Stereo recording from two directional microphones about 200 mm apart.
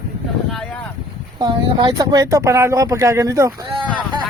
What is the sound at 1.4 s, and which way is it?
A man's voice, 20° right (ahead or behind).